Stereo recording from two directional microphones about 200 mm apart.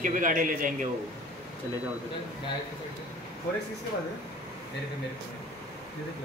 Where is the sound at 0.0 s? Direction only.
40° right (ahead or behind).